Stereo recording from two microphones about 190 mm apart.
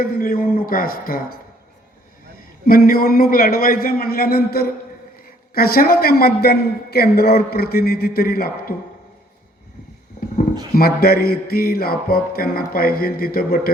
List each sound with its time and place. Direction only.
0.0 s a man's voice: 50° left (ahead or behind)
2.6 s a man's voice: 50° left (ahead or behind)
10.8 s a man's voice: 55° left (ahead or behind)